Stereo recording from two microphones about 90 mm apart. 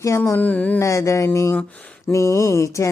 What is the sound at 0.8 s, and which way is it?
Speech, 35° left (ahead or behind).